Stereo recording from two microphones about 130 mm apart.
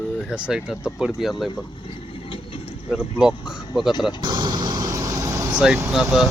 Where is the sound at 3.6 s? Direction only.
35° left (ahead or behind).